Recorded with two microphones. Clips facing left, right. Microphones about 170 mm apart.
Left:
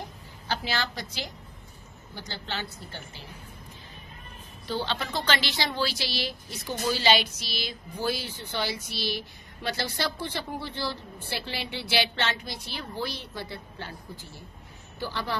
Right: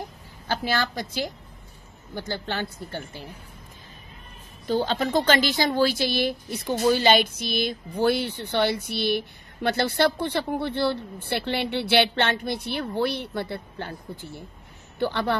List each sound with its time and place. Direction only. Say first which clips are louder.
0.5 s speech: right 5 dB; 50° right (ahead or behind)
4.6 s a woman's voice: right 7 dB; 45° right (ahead or behind); by 15.3 s 60° right (ahead or behind)